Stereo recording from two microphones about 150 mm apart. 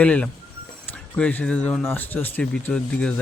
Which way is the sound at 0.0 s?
10° left (ahead or behind).